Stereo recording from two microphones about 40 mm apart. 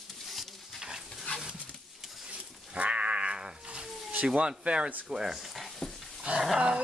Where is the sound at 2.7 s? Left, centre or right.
Right.